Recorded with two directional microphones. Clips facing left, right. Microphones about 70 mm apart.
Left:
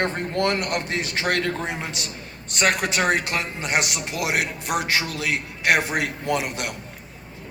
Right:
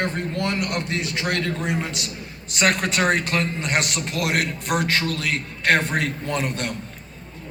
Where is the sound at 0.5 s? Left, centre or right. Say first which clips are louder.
Even; left.